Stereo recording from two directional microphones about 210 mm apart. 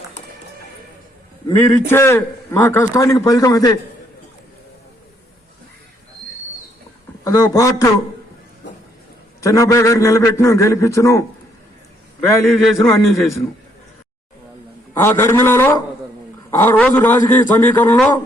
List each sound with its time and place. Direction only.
1.5 s a man's voice: 10° left (ahead or behind)
7.3 s a man's voice: 15° left (ahead or behind)
9.4 s a man's voice: 15° left (ahead or behind)
14.9 s a man's voice: 10° left (ahead or behind)